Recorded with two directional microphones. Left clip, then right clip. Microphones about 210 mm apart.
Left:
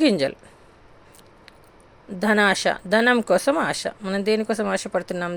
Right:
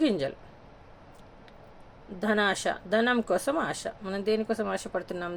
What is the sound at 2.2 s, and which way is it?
A woman's voice, 40° left (ahead or behind).